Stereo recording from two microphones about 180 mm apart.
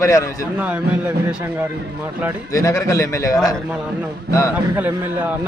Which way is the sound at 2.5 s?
20° left (ahead or behind).